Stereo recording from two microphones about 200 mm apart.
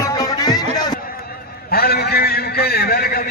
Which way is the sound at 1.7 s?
50° left (ahead or behind).